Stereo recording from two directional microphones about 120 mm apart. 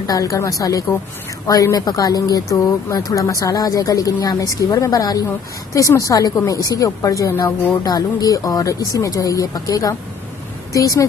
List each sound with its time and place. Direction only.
0.0 s a woman's voice: 30° left (ahead or behind)